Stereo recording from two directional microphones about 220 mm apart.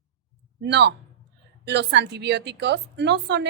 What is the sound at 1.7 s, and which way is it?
A woman's voice, 50° right (ahead or behind).